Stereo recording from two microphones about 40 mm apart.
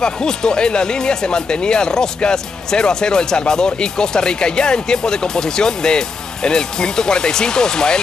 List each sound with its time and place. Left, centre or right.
0.0 s speech: centre